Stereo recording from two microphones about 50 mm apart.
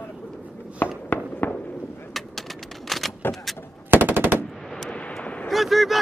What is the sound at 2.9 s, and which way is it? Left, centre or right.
Vehicle, centre.